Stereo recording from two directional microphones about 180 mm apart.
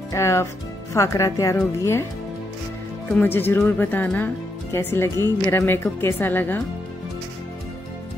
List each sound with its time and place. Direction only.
0.1 s speech: 15° left (ahead or behind)
3.1 s speech: 10° left (ahead or behind)